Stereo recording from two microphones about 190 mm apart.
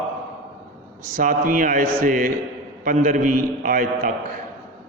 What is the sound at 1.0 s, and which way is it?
A man's voice, 45° right (ahead or behind).